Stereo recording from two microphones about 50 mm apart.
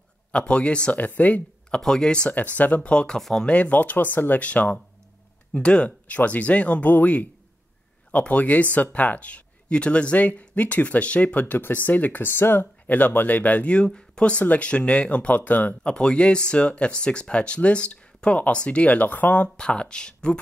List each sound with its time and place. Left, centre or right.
0.3 s speech: left
0.9 s speech: left
1.8 s speech: centre
2.3 s speech: left
2.9 s speech: centre
3.2 s speech: centre
3.4 s speech: left
6.0 s speech: left
11.5 s speech: left
12.3 s speech: left
12.8 s speech: left
13.7 s speech: centre; by 15.7 s left
15.8 s speech: centre
19.5 s speech: centre